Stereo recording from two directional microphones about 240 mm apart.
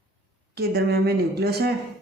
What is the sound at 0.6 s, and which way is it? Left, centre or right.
A woman's voice, right.